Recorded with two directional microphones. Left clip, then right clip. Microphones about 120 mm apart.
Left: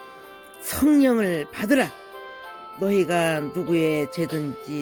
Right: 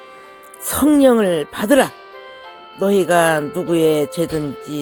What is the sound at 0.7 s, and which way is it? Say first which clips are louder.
Speech: right 7 dB; 35° right (ahead or behind).